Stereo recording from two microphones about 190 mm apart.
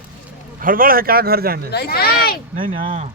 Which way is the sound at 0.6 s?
50° right (ahead or behind).